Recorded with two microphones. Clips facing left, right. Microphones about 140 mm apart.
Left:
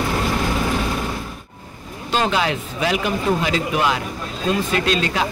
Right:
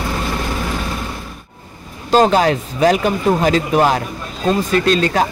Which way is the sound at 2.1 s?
40° right (ahead or behind).